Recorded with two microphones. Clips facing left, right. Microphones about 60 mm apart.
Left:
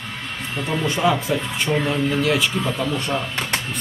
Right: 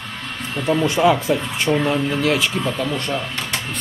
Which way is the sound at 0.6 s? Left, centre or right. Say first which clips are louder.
Right 4 dB; centre.